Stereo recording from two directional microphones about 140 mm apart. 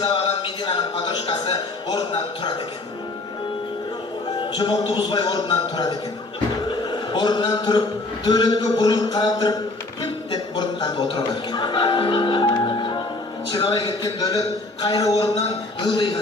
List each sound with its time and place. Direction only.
0.0 s speech: 40° left (ahead or behind)
4.4 s a man's voice: 35° left (ahead or behind)
15.4 s speech: 35° left (ahead or behind)